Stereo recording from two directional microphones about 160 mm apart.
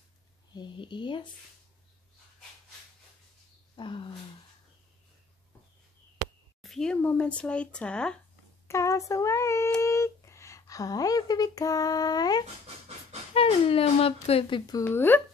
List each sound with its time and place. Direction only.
0.6 s speech: 30° left (ahead or behind)
3.7 s speech: 30° left (ahead or behind)
6.6 s speech: 5° left (ahead or behind)
8.6 s a woman's voice: 20° left (ahead or behind)
13.3 s speech: 35° left (ahead or behind)
14.7 s speech: 15° left (ahead or behind)